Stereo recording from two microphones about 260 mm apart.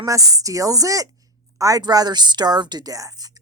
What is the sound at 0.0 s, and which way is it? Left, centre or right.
A woman's voice, centre.